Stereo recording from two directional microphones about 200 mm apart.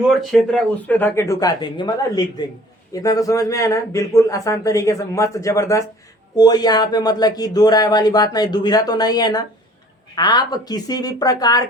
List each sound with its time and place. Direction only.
0.3 s a man's voice: 5° left (ahead or behind)